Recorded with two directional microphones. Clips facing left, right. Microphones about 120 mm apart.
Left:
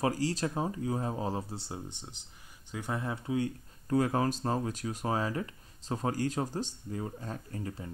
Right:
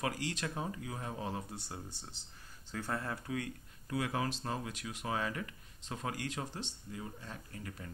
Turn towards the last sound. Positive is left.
turn(degrees=30)  # may be behind; listen again after turning